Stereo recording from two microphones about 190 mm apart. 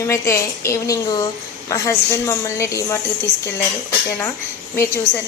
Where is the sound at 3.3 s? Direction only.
45° right (ahead or behind).